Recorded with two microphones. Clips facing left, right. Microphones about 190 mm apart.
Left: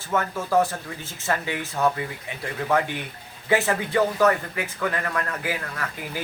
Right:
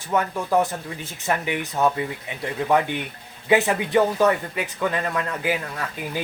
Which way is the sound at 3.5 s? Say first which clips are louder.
Right 3 dB; 15° right (ahead or behind).